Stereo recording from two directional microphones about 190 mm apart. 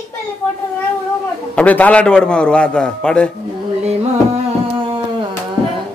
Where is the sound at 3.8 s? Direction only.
30° right (ahead or behind).